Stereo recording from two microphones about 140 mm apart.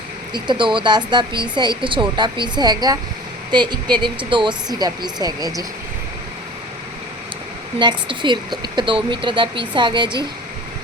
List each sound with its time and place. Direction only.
0.3 s speech: 35° right (ahead or behind)
7.8 s speech: 35° right (ahead or behind)